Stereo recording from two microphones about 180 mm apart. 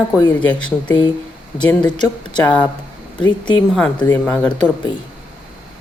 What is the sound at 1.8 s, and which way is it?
Speech, 25° left (ahead or behind).